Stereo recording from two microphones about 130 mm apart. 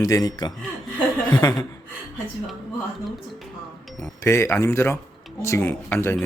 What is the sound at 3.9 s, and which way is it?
Speech, 20° left (ahead or behind).